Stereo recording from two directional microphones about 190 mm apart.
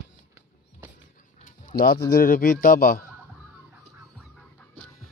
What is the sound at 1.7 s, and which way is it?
Speech, 50° left (ahead or behind).